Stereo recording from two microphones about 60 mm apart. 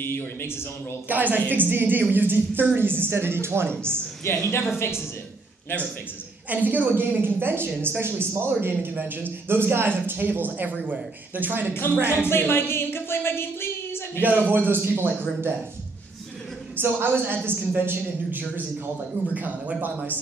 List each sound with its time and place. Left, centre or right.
0.0 s speech: left
1.0 s a man's voice: right
4.2 s a woman's voice: left
6.5 s a man's voice: right
11.7 s speech: left
14.2 s a man's voice: right
16.7 s a man's voice: right